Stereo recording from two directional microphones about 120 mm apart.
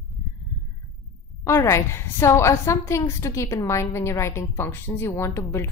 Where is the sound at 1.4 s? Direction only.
25° left (ahead or behind).